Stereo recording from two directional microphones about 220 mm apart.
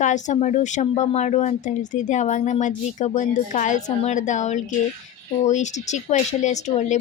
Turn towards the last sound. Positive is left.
turn(degrees=30)  # may be behind; listen again after turning